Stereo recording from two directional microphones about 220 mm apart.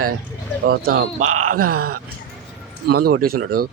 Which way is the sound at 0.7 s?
45° right (ahead or behind).